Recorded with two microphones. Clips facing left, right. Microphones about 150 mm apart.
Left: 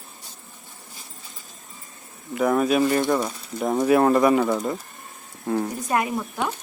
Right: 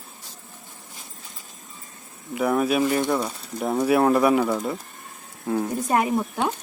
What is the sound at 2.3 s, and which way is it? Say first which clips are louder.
A man's voice: left 1 dB; 5° right (ahead or behind).